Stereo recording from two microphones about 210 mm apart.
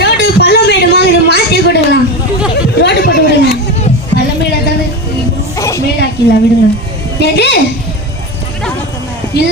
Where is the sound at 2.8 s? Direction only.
45° left (ahead or behind).